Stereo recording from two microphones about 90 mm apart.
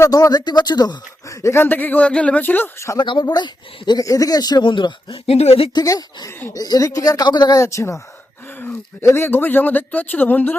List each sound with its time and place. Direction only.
0.0 s speech: 45° left (ahead or behind)
1.3 s speech: 35° left (ahead or behind)
3.0 s speech: 55° left (ahead or behind)
4.0 s speech: 40° left (ahead or behind); by 5.7 s 90° left
5.7 s a woman's voice: 45° left (ahead or behind)
7.6 s a woman's voice: 35° left (ahead or behind)
8.5 s a sound: 20° left (ahead or behind)
9.0 s speech: 25° left (ahead or behind)